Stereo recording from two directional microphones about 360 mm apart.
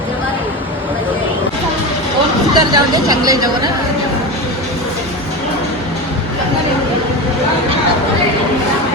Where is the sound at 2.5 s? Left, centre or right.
Centre.